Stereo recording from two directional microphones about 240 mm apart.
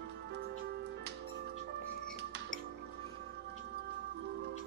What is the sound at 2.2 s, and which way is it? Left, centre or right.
Music, right.